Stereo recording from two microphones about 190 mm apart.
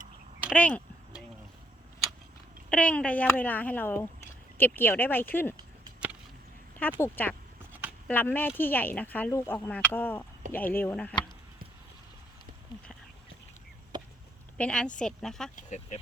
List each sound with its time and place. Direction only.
0.5 s speech: 5° left (ahead or behind)
2.6 s speech: 5° left (ahead or behind)
7.0 s speech: 10° left (ahead or behind)
13.9 s a sound: 25° right (ahead or behind)
14.6 s a woman's voice: 5° left (ahead or behind)
15.5 s speech: 40° left (ahead or behind)